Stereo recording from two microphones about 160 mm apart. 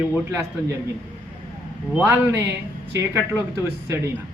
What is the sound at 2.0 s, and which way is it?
Speech, 10° right (ahead or behind).